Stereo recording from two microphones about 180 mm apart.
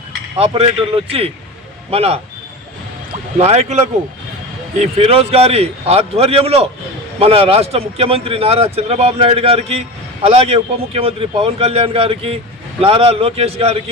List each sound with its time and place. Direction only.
0.3 s speech: 30° right (ahead or behind)
1.9 s speech: 35° right (ahead or behind)
4.8 s speech: 35° right (ahead or behind)